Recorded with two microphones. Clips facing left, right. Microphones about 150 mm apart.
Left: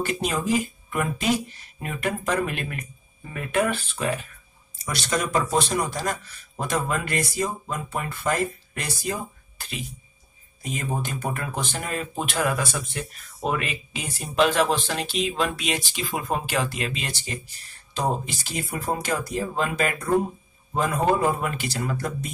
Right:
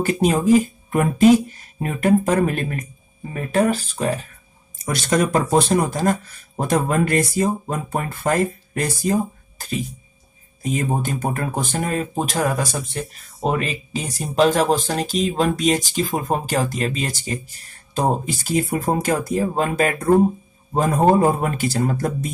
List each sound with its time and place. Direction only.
0.0 s speech: 50° right (ahead or behind)
4.8 s speech: 50° right (ahead or behind)